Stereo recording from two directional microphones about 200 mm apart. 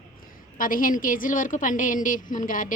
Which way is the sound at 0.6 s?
45° left (ahead or behind).